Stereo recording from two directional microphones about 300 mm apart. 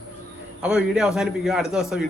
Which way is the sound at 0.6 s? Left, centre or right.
Centre.